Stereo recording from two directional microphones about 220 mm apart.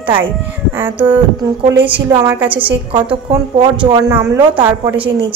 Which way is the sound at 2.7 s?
20° right (ahead or behind).